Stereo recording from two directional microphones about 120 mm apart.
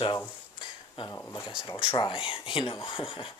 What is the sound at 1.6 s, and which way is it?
Speech, 45° left (ahead or behind).